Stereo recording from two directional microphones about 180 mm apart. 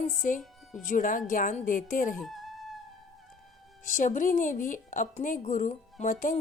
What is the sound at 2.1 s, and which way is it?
Music, centre (ahead or behind).